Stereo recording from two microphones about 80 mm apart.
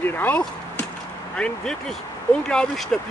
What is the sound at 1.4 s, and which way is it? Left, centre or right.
Speech, centre.